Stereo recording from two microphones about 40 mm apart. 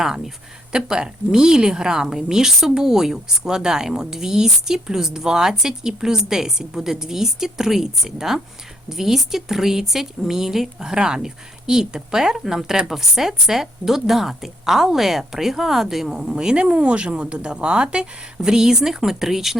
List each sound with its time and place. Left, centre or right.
0.7 s speech: centre
16.1 s speech: centre